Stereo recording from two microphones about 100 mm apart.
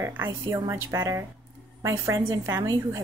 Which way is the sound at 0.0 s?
25° right (ahead or behind).